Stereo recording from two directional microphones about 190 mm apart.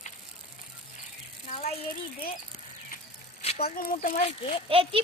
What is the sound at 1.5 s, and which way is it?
Speech, 35° left (ahead or behind).